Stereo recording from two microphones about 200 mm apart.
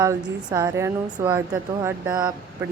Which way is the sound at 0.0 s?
15° right (ahead or behind).